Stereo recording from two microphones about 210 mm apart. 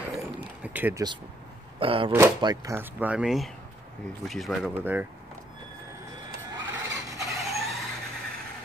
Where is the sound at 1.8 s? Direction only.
25° right (ahead or behind).